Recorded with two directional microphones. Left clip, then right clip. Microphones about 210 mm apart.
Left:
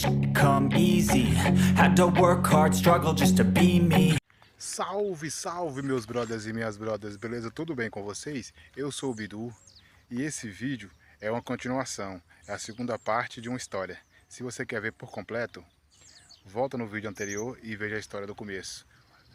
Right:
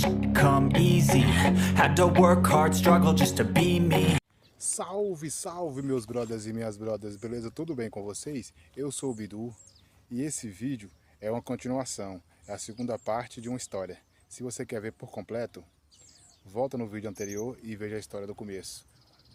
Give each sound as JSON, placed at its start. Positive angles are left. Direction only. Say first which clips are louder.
{"t": 0.0, "sound": "music", "louder": "right 1 dB", "side_deg": 0}